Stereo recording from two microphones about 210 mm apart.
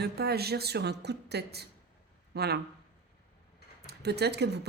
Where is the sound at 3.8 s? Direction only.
50° right (ahead or behind).